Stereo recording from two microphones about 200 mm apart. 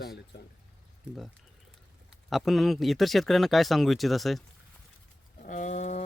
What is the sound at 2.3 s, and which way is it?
Speech, centre (ahead or behind).